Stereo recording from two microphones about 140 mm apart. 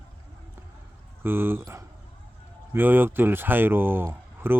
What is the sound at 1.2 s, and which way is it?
Speech, 15° right (ahead or behind).